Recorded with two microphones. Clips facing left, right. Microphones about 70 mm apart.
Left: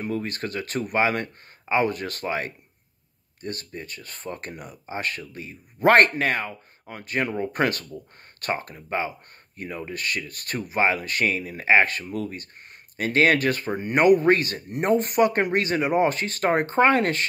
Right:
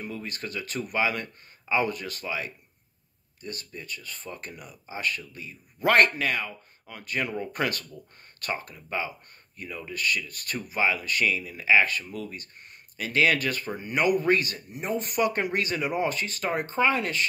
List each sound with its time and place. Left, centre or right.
0.0 s speech: left
4.1 s speech: left
14.7 s speech: left
15.0 s speech: left